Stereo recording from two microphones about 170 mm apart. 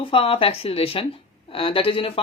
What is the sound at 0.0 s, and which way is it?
Speech, 35° left (ahead or behind).